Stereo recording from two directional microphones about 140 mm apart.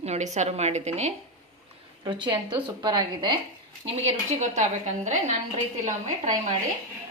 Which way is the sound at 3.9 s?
50° right (ahead or behind).